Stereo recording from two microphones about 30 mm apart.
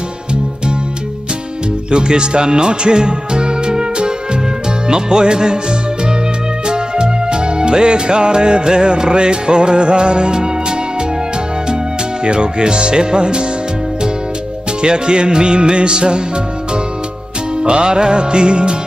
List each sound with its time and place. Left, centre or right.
1.9 s speech: right
4.8 s music: right
12.3 s music: right
14.8 s music: right
17.6 s music: right